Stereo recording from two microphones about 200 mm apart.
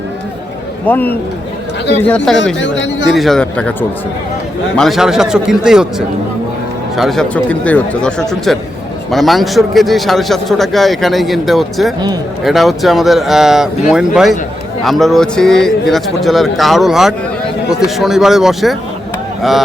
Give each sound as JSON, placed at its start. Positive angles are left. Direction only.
{"t": 0.9, "sound": "speech", "side_deg": 10}
{"t": 2.6, "sound": "speech", "side_deg": 65}
{"t": 3.2, "sound": "a man's voice", "side_deg": 0}